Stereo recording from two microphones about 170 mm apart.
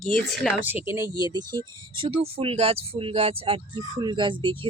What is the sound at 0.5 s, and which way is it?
Speech, 10° right (ahead or behind).